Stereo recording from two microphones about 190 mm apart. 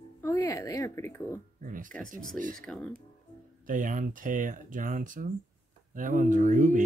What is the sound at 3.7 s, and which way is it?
Speech, 45° right (ahead or behind).